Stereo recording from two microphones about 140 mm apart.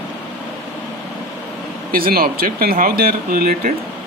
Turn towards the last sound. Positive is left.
turn(degrees=-90)